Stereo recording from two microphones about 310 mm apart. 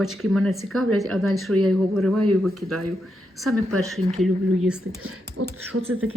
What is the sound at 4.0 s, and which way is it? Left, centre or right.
Speech, centre.